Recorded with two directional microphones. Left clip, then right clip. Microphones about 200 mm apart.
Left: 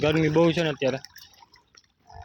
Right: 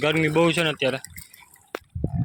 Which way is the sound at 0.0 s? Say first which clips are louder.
Right 1 dB; 15° left (ahead or behind).